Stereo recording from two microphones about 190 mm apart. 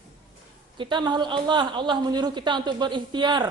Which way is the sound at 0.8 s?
25° right (ahead or behind).